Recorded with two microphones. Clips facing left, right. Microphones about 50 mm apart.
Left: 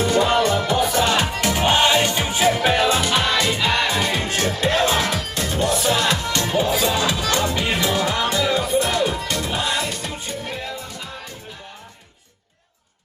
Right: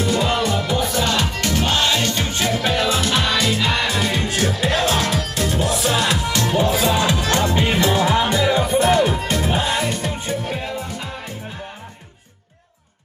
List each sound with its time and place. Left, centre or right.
0.0 s music: centre
4.3 s music: centre
9.5 s music: right